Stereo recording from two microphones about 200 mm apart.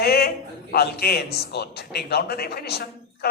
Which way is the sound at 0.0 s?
50° left (ahead or behind).